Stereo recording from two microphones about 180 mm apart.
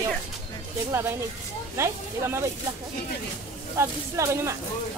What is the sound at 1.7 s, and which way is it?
Speech, 15° right (ahead or behind).